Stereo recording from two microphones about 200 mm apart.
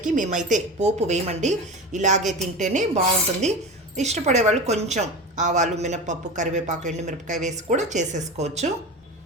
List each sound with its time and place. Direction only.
0.0 s a woman's voice: 40° right (ahead or behind)